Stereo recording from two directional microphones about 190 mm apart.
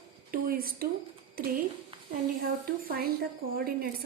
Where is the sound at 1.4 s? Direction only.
50° right (ahead or behind).